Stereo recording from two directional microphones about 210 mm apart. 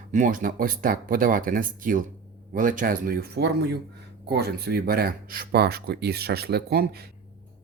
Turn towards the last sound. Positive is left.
turn(degrees=-45)  # may be behind; listen again after turning